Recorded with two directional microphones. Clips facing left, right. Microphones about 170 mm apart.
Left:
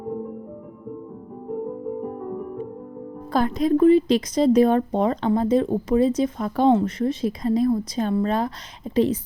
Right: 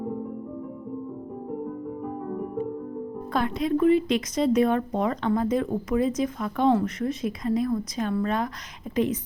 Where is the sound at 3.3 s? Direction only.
40° left (ahead or behind).